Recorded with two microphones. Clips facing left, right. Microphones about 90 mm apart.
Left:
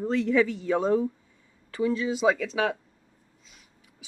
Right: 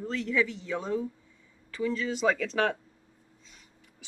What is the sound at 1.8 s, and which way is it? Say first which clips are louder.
Speech: left 4 dB; 15° left (ahead or behind).